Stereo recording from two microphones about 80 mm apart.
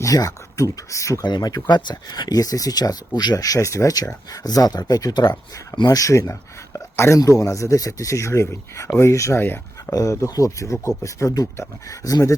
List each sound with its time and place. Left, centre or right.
0.0 s speech: left
1.2 s speech: left
9.4 s speech: left
9.9 s speech: left